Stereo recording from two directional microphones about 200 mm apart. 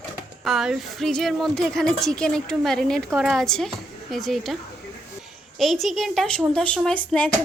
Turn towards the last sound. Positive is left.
turn(degrees=5)  # may be behind; listen again after turning